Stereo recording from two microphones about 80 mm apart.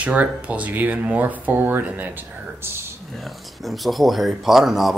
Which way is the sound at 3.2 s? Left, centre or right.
Centre.